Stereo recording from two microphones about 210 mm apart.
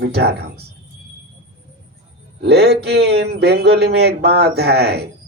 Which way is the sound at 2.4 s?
50° right (ahead or behind).